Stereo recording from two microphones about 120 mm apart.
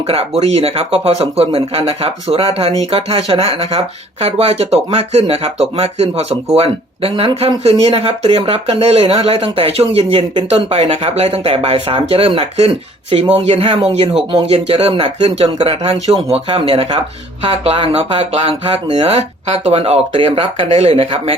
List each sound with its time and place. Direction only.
0.1 s speech: 55° right (ahead or behind)
20.7 s speech: 60° right (ahead or behind)